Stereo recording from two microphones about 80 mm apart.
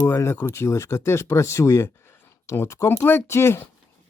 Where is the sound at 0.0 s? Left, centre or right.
Left.